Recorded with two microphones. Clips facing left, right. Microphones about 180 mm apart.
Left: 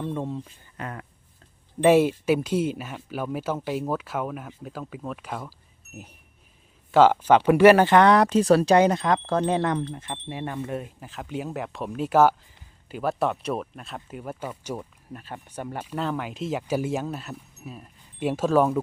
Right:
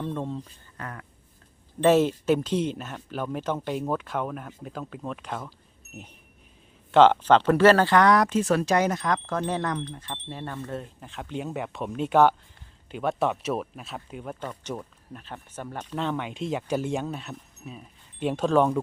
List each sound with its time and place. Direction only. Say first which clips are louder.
0.0 s speech: left 1 dB; 5° left (ahead or behind)
0.8 s speech: left 3 dB; 20° left (ahead or behind)
1.8 s speech: left 2 dB; 10° left (ahead or behind)
6.9 s speech: even; 5° left (ahead or behind)